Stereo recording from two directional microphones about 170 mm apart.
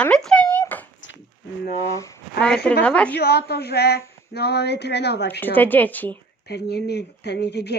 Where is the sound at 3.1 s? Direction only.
70° left (ahead or behind).